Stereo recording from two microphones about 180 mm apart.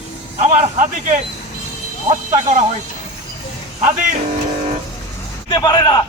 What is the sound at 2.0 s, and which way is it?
Speech, 40° right (ahead or behind).